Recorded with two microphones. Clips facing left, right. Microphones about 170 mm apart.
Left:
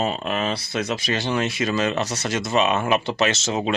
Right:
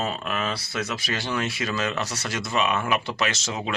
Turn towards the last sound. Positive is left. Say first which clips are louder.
# left 6 dB
turn(degrees=25)  # may be behind; listen again after turning